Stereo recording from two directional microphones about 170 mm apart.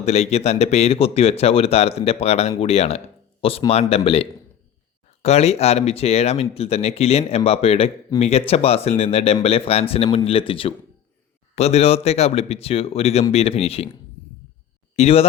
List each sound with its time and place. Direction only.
0.0 s speech: 40° left (ahead or behind)
14.9 s speech: 35° left (ahead or behind)